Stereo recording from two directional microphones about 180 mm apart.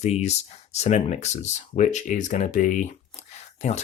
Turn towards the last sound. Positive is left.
turn(degrees=40)  # may be behind; listen again after turning